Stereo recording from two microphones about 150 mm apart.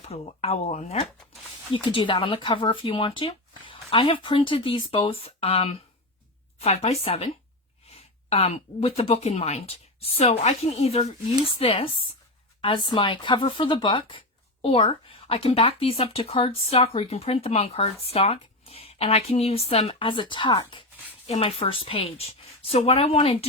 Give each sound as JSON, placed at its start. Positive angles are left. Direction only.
{"t": 0.0, "sound": "speech", "side_deg": 45}
{"t": 1.7, "sound": "speech", "side_deg": 35}